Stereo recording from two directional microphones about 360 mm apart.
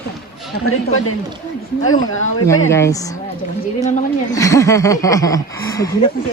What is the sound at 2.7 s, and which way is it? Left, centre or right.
Speech, centre.